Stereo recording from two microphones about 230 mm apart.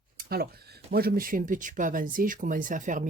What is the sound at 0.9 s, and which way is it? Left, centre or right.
Speech, right.